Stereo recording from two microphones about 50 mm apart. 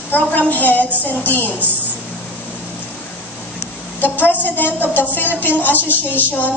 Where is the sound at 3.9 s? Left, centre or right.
Left.